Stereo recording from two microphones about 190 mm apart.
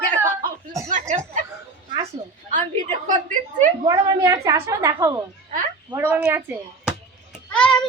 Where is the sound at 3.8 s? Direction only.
20° right (ahead or behind).